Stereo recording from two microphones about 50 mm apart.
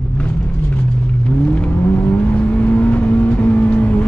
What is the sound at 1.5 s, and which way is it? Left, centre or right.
Vehicle, left.